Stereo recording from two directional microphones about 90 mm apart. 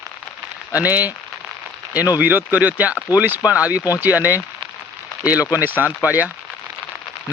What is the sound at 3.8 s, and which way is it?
Speech, 40° left (ahead or behind).